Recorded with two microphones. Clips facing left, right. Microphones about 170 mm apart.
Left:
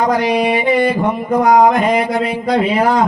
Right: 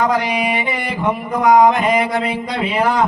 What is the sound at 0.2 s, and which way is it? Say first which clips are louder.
Speech: left 5 dB; 35° left (ahead or behind).